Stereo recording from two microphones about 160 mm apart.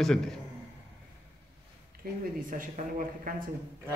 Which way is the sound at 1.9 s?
70° right (ahead or behind).